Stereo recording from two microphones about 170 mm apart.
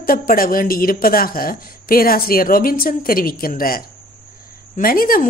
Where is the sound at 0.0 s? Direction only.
55° left (ahead or behind).